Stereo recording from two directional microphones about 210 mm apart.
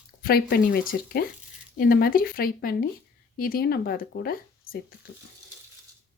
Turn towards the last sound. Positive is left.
turn(degrees=45)  # may be behind; listen again after turning